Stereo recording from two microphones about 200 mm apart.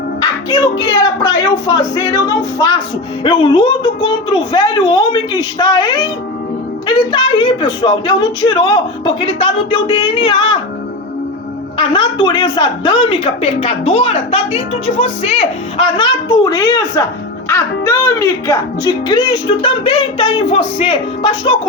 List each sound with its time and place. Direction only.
0.2 s music: 20° left (ahead or behind)
0.9 s speech: 20° left (ahead or behind)
11.8 s speech: 25° left (ahead or behind)